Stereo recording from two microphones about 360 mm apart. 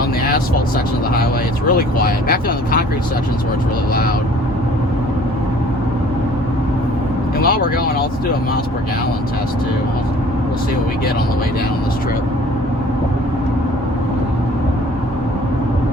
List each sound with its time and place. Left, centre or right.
2.0 s speech: left
7.4 s speech: left